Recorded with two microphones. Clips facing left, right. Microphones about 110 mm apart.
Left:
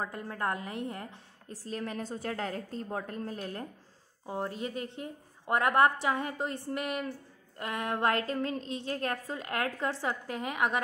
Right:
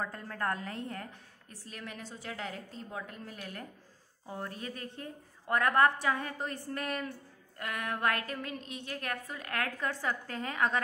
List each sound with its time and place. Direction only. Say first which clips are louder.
0.0 s a woman's voice: left 2 dB; 15° left (ahead or behind)
1.5 s a woman's voice: left 8 dB; 35° left (ahead or behind)
4.3 s a woman's voice: left 5 dB; 25° left (ahead or behind)